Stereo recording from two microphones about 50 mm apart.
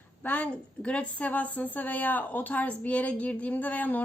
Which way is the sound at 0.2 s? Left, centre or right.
Left.